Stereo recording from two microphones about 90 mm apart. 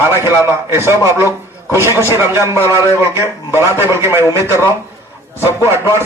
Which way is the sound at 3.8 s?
30° right (ahead or behind).